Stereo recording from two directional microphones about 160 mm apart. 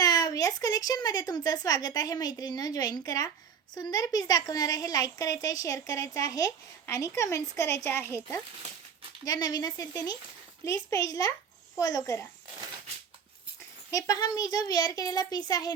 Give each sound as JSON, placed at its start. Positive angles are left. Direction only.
{"t": 0.0, "sound": "a woman's voice", "side_deg": 20}
{"t": 13.9, "sound": "a woman's voice", "side_deg": 20}